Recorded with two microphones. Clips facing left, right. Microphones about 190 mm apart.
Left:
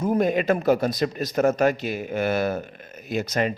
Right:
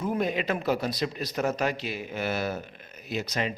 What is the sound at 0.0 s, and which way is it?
Speech, 45° left (ahead or behind).